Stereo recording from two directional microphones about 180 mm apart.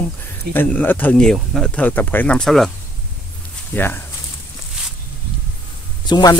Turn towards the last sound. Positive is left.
turn(degrees=25)  # may be behind; listen again after turning